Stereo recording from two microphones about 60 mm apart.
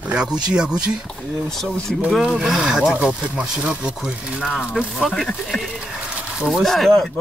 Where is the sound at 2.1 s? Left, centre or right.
Centre.